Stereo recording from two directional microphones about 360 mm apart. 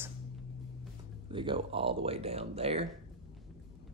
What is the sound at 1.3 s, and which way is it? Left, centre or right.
Speech, centre.